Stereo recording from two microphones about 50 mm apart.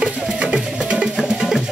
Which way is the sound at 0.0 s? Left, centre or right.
Centre.